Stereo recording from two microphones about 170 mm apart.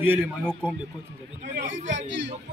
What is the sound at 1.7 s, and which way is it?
Speech, 90° right.